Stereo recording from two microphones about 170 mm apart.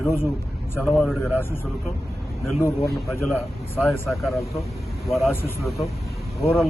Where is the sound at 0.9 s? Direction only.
Centre (ahead or behind).